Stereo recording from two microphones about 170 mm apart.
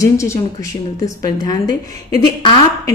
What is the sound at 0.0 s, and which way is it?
A woman's voice, 20° left (ahead or behind).